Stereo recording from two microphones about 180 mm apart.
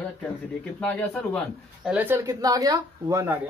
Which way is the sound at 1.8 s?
10° right (ahead or behind).